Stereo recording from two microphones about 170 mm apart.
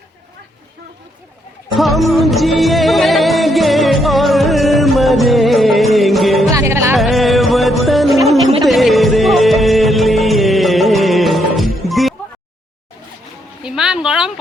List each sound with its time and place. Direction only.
1.7 s music: centre (ahead or behind)
6.5 s music: 15° right (ahead or behind)
6.9 s music: centre (ahead or behind)
13.6 s a sound: 5° right (ahead or behind)